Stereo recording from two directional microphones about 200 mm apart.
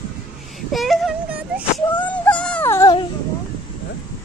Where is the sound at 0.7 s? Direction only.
Centre (ahead or behind).